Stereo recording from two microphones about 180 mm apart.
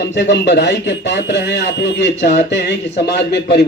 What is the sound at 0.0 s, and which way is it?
Speech, 70° left (ahead or behind).